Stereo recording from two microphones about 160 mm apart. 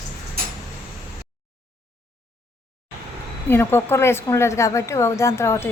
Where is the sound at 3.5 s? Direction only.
15° left (ahead or behind).